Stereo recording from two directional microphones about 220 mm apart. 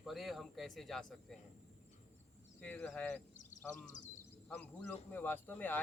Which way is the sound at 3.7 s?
35° left (ahead or behind).